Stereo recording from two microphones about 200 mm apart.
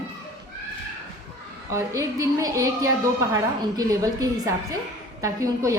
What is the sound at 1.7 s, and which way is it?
A woman's voice, 15° right (ahead or behind).